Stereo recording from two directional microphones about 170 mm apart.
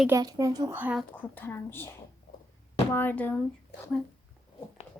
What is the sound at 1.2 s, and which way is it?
Speech, 10° left (ahead or behind).